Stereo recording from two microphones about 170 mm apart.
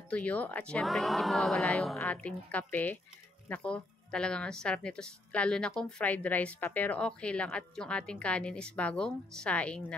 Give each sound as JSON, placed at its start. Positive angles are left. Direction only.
{"t": 0.1, "sound": "speech", "side_deg": 10}